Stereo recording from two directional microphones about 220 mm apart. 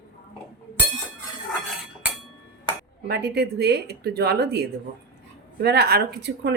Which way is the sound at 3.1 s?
45° right (ahead or behind).